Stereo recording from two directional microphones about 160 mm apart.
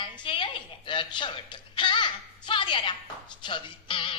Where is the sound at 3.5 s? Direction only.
30° left (ahead or behind).